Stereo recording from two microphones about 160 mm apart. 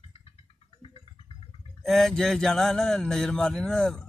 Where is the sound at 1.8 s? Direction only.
5° left (ahead or behind).